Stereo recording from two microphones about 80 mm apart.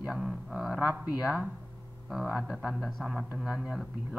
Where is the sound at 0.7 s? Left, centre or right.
Centre.